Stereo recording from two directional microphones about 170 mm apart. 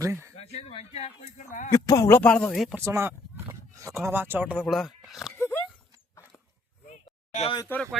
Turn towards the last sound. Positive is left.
turn(degrees=35)  # may be behind; listen again after turning